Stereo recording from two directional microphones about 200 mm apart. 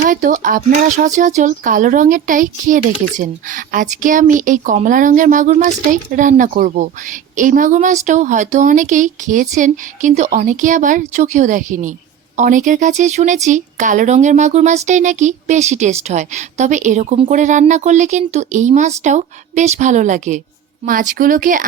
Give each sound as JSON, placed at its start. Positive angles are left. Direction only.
{"t": 0.0, "sound": "speech", "side_deg": -40}